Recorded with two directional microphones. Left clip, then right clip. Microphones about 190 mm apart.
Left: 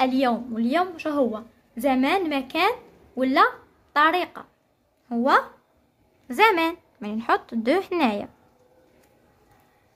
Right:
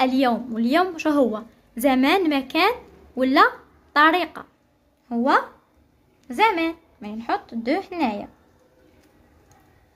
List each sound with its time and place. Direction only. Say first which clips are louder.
0.0 s a woman's voice: right 2 dB; centre (ahead or behind)
5.0 s speech: even; 10° left (ahead or behind)
6.2 s speech: left 1 dB; 20° left (ahead or behind)